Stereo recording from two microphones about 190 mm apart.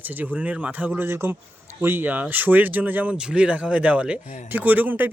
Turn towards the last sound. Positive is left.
turn(degrees=-10)  # may be behind; listen again after turning